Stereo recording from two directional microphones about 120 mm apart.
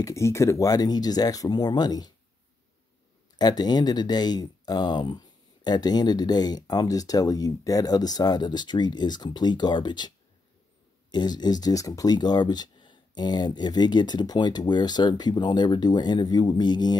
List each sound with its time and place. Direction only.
0.0 s speech: 25° left (ahead or behind)
3.3 s speech: 35° left (ahead or behind)